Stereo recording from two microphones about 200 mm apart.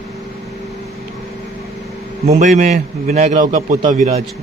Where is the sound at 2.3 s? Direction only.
35° right (ahead or behind).